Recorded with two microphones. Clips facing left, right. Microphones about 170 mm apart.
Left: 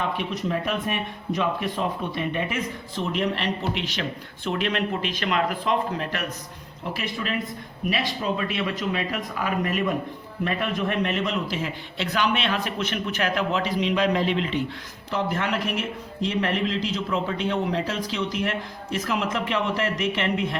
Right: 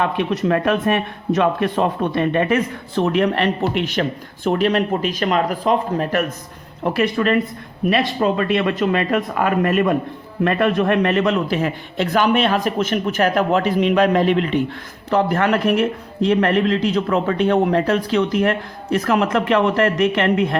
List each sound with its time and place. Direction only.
0.0 s speech: 65° right (ahead or behind)
4.4 s speech: 40° right (ahead or behind)
6.8 s speech: 65° right (ahead or behind)